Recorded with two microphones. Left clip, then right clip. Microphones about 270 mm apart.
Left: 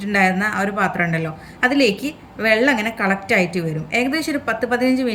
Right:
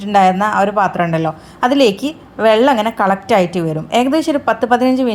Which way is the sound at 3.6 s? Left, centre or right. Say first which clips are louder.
Right 6 dB; right.